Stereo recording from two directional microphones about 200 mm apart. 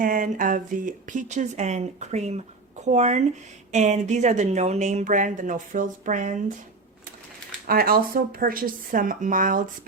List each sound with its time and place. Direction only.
0.0 s speech: 45° right (ahead or behind)
7.7 s speech: 50° right (ahead or behind)